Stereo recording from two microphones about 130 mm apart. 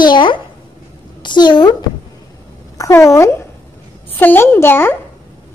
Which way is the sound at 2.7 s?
25° left (ahead or behind).